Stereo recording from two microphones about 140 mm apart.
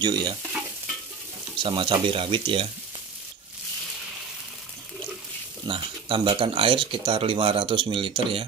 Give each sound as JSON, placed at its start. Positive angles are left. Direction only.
{"t": 0.0, "sound": "speech", "side_deg": -30}
{"t": 1.6, "sound": "speech", "side_deg": -35}
{"t": 5.7, "sound": "speech", "side_deg": -40}